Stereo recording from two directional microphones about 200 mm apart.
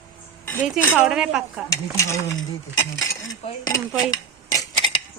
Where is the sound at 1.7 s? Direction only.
15° left (ahead or behind).